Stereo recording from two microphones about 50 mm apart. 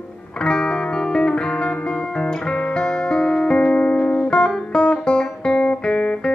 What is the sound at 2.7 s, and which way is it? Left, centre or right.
Music, centre.